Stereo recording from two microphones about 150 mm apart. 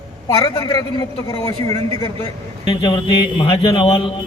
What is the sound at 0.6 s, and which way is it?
Speech, 30° left (ahead or behind).